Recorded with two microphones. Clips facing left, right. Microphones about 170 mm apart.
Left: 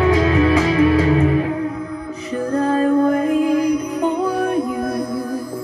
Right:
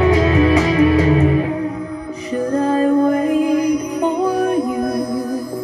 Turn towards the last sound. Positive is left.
turn(degrees=-15)  # may be behind; listen again after turning